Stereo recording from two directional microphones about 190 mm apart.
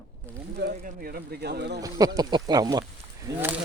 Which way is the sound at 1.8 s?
20° right (ahead or behind).